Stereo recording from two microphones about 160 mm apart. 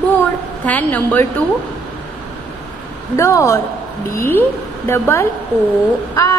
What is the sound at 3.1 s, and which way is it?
A woman's voice, 20° left (ahead or behind).